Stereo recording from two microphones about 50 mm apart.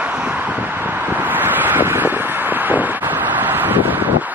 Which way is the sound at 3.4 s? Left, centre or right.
Right.